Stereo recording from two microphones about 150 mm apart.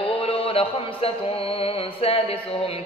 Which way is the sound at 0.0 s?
40° left (ahead or behind).